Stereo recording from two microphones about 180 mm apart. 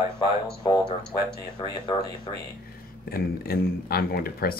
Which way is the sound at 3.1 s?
55° left (ahead or behind).